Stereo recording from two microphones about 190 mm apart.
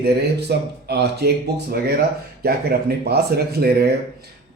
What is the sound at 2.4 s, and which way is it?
Speech, 55° right (ahead or behind).